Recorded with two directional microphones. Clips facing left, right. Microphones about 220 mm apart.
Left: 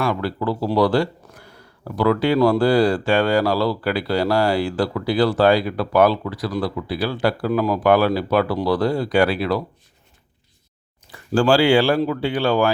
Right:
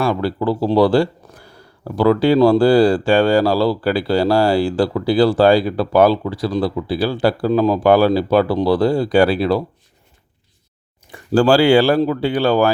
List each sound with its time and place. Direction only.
0.0 s speech: 30° right (ahead or behind)
11.3 s speech: 40° right (ahead or behind)